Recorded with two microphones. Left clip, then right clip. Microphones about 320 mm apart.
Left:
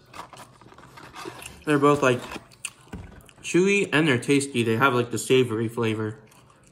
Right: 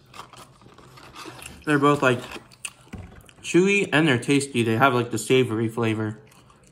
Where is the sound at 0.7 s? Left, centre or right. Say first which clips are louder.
Left 1 dB; centre.